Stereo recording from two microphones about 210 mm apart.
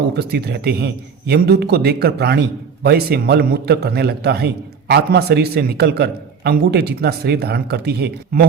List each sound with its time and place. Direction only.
0.2 s a man's voice: 50° right (ahead or behind)